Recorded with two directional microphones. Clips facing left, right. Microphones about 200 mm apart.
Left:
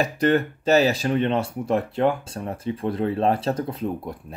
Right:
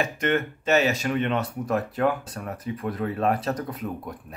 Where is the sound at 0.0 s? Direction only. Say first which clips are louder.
Left 4 dB; 35° left (ahead or behind).